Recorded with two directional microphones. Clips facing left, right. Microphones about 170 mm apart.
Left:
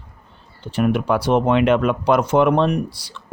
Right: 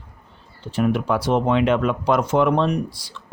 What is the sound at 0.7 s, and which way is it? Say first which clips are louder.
Speech: left 2 dB; 65° left (ahead or behind).